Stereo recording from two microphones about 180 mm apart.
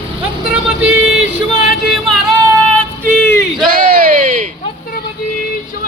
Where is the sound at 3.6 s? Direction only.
50° right (ahead or behind).